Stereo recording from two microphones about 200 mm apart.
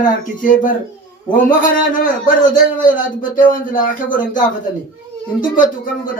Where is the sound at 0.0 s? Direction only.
40° left (ahead or behind).